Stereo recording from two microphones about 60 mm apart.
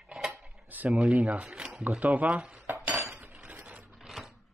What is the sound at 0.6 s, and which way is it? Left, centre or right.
Speech, right.